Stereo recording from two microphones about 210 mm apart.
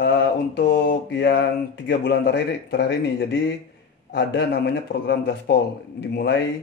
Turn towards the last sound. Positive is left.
turn(degrees=55)  # may be behind; listen again after turning